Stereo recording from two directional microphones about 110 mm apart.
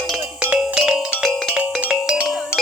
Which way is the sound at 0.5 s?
5° right (ahead or behind).